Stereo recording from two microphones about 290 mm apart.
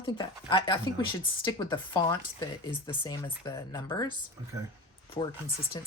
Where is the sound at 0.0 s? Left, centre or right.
Centre.